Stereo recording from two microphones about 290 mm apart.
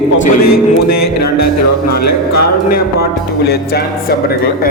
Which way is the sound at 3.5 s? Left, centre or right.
Left.